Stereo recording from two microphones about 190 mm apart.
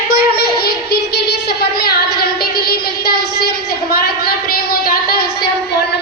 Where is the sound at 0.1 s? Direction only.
55° left (ahead or behind).